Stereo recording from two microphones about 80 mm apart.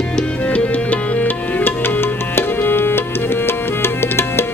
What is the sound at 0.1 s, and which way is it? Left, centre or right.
Music, centre.